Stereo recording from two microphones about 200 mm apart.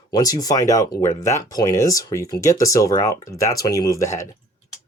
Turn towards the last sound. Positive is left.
turn(degrees=15)  # may be behind; listen again after turning